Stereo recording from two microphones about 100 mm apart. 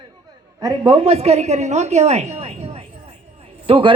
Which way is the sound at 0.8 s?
65° right (ahead or behind).